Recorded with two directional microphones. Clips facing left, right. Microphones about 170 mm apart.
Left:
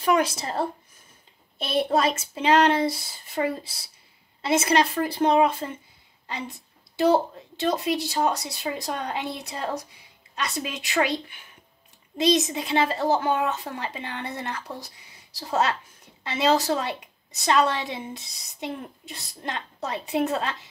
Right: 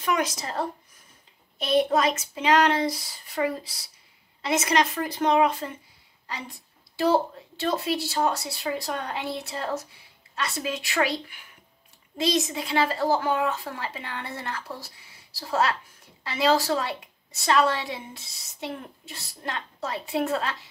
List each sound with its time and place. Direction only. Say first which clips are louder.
0.0 s a woman's voice: left 4 dB; 30° left (ahead or behind)